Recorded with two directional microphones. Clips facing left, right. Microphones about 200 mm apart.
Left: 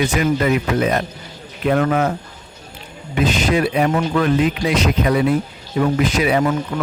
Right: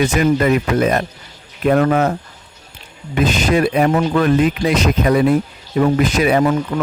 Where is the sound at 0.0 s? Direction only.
45° right (ahead or behind).